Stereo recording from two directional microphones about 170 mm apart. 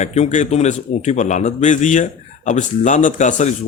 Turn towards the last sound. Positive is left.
turn(degrees=45)  # may be behind; listen again after turning